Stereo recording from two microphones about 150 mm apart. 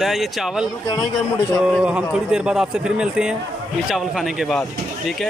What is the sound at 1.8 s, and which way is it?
Speech, 5° right (ahead or behind).